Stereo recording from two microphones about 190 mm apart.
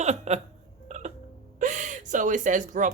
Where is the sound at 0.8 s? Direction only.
40° right (ahead or behind).